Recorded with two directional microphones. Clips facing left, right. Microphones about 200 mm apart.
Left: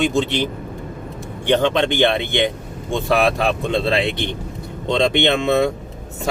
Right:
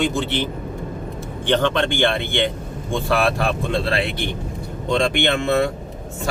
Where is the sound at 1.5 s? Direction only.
15° left (ahead or behind).